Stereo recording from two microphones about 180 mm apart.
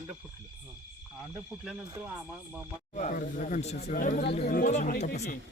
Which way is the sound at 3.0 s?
45° left (ahead or behind).